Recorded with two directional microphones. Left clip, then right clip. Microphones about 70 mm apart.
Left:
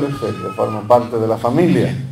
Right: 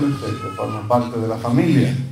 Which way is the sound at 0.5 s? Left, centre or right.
Centre.